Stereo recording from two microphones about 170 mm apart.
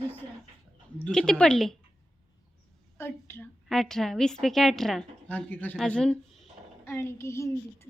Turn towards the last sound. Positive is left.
turn(degrees=15)  # may be behind; listen again after turning